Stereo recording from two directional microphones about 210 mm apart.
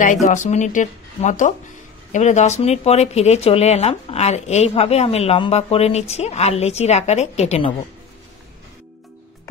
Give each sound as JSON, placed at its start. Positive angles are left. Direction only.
{"t": 0.0, "sound": "speech", "side_deg": 35}